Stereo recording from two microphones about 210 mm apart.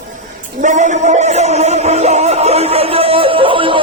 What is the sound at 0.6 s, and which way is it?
Music, 35° right (ahead or behind).